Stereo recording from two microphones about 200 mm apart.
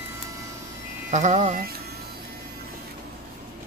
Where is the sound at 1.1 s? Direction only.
35° right (ahead or behind).